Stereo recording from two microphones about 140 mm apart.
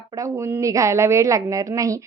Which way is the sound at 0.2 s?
20° right (ahead or behind).